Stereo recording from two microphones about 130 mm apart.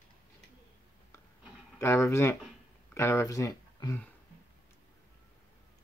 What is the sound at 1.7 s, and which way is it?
Speech, 20° left (ahead or behind).